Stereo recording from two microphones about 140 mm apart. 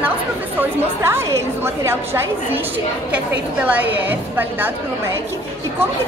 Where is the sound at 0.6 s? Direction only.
15° right (ahead or behind).